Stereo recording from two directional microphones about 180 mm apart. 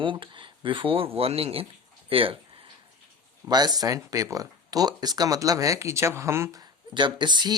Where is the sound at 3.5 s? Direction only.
20° right (ahead or behind).